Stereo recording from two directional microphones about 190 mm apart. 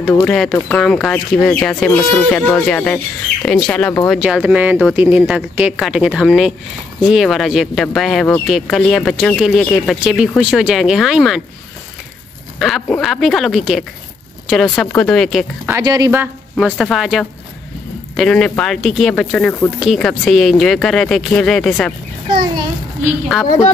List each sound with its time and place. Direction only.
0.0 s speech: 5° left (ahead or behind)
4.1 s speech: 5° right (ahead or behind)
12.5 s speech: centre (ahead or behind)
15.8 s speech: 20° right (ahead or behind)
16.7 s speech: centre (ahead or behind)